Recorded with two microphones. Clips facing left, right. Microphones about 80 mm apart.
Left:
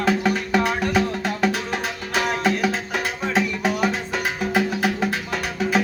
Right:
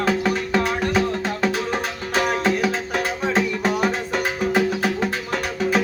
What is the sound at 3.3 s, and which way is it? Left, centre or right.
Music, centre.